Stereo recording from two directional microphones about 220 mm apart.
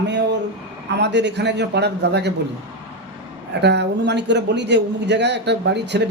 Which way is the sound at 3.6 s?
50° right (ahead or behind).